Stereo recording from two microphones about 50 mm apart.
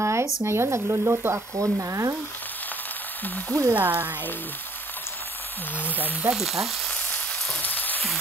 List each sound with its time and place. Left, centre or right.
0.0 s a sound: right
0.5 s speech: right
1.3 s speech: right
3.4 s speech: right
3.7 s speech: right
5.8 s speech: right
6.3 s frying: centre
6.9 s frying: left
7.6 s frying: left